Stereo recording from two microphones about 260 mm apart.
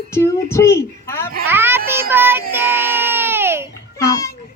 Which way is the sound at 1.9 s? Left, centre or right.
Centre.